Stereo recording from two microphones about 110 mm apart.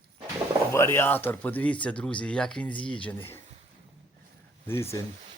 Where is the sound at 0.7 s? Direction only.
25° left (ahead or behind).